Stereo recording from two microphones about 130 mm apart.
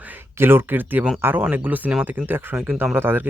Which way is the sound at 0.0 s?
15° right (ahead or behind).